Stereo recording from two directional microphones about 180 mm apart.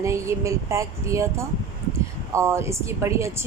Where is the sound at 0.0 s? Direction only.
15° right (ahead or behind).